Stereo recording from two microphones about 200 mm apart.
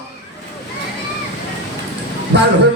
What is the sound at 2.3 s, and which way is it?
Music, 60° right (ahead or behind).